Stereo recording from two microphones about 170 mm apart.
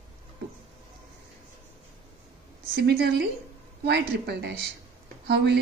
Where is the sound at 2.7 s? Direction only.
70° right (ahead or behind).